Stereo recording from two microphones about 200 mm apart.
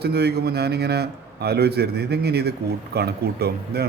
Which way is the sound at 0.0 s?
55° right (ahead or behind).